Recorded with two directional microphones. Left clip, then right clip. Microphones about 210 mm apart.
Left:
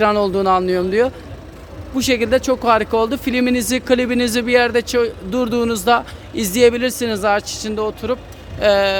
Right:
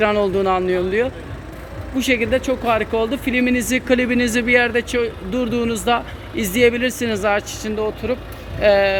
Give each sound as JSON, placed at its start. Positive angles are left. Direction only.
{"t": 0.0, "sound": "speech", "side_deg": 20}